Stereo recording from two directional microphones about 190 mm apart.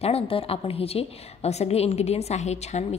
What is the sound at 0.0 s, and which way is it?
A woman's voice, 30° left (ahead or behind).